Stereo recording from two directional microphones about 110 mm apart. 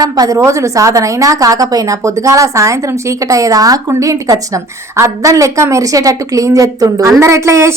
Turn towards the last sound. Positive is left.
turn(degrees=-25)  # may be behind; listen again after turning